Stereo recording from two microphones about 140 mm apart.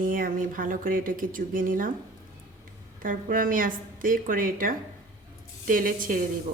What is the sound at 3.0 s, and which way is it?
Speech, 75° right (ahead or behind).